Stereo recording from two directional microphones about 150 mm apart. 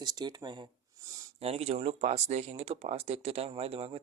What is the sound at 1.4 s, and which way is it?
Speech, 45° right (ahead or behind).